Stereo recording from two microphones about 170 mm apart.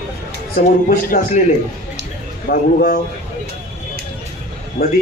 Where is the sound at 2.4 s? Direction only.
60° left (ahead or behind).